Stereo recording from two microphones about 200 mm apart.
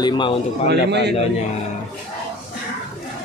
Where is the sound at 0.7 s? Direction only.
60° right (ahead or behind).